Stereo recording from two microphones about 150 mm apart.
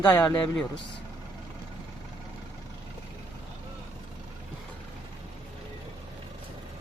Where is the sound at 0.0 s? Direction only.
30° left (ahead or behind).